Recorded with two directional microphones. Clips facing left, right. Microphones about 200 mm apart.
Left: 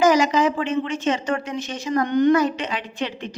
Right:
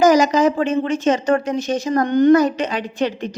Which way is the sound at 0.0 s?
40° right (ahead or behind).